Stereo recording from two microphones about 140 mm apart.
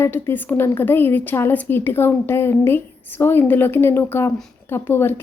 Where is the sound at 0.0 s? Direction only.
15° left (ahead or behind).